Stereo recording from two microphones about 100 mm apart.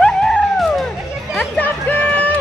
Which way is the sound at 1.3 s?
15° left (ahead or behind).